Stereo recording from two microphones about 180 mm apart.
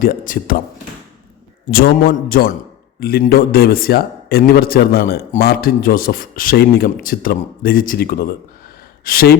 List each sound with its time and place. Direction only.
0.0 s a man's voice: 50° left (ahead or behind)
1.7 s a man's voice: 55° left (ahead or behind)